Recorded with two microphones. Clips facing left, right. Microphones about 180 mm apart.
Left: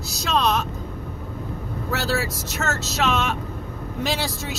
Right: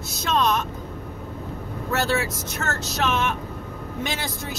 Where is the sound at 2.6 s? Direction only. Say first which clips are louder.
Left 2 dB; 75° left (ahead or behind).